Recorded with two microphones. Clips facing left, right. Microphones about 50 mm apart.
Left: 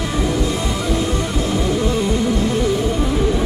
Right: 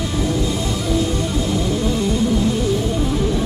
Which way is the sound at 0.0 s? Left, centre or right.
Left.